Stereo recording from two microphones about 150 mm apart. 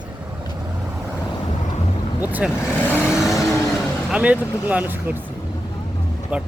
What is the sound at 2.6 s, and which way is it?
Vehicle, 15° left (ahead or behind).